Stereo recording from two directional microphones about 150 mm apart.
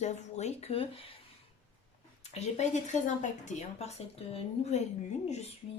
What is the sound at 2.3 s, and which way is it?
Speech, 50° left (ahead or behind).